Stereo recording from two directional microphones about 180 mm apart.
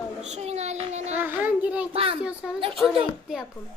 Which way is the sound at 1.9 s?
30° right (ahead or behind).